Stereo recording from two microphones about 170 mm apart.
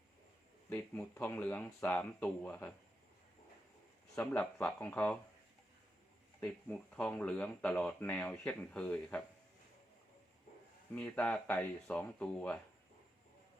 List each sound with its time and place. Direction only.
0.7 s speech: 10° left (ahead or behind)
4.2 s speech: 5° left (ahead or behind)
6.4 s speech: 5° left (ahead or behind)
10.9 s speech: 5° left (ahead or behind)